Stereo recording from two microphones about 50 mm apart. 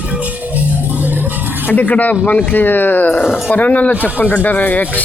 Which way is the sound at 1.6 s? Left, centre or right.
Left.